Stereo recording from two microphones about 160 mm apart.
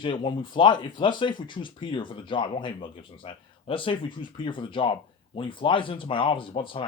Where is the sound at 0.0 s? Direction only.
30° left (ahead or behind).